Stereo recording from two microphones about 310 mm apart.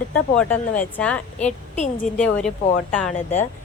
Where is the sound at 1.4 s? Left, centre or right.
Left.